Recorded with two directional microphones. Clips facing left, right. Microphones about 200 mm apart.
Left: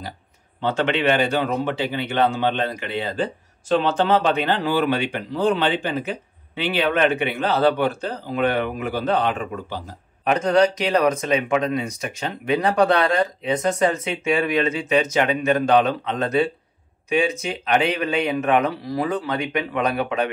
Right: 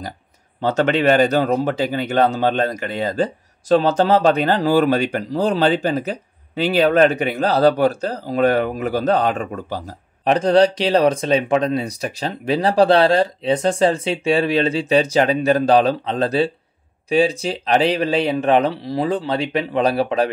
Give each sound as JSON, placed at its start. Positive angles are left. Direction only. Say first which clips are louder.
{"t": 0.6, "sound": "a man's voice", "louder": "right 4 dB", "side_deg": -40}
{"t": 10.2, "sound": "a man's voice", "louder": "right 3 dB", "side_deg": -30}